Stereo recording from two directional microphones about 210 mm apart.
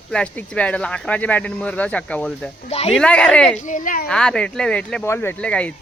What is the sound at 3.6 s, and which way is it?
Speech, 40° left (ahead or behind).